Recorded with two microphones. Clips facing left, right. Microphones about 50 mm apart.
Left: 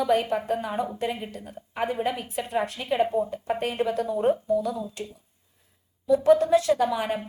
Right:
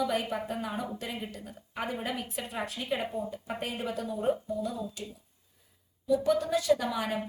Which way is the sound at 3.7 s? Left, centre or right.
Left.